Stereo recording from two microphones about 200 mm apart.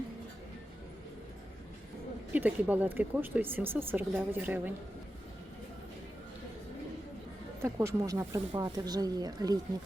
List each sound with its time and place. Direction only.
2.3 s speech: 5° right (ahead or behind)
7.6 s speech: 15° right (ahead or behind)